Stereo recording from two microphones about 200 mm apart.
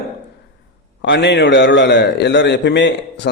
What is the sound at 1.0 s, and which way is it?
A man's voice, 60° left (ahead or behind).